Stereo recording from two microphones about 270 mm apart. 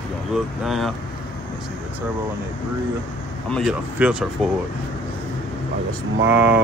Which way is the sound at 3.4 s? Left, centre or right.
Centre.